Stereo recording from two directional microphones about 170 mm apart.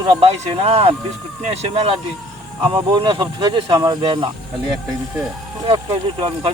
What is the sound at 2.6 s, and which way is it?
Speech, 30° right (ahead or behind).